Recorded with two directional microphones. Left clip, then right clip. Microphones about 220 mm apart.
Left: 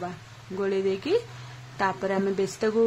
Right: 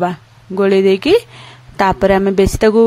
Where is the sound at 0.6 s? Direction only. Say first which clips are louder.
Right 15 dB; 40° right (ahead or behind).